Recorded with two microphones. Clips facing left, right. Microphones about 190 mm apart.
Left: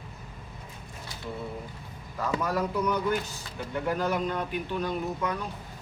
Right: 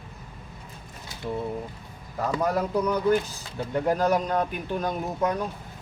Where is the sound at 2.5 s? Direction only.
35° right (ahead or behind).